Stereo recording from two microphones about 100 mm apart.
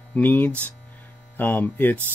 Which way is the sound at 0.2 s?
20° left (ahead or behind).